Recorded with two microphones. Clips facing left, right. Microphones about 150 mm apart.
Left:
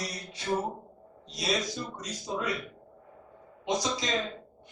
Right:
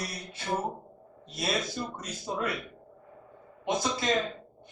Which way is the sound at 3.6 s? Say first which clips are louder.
Even; 55° right (ahead or behind).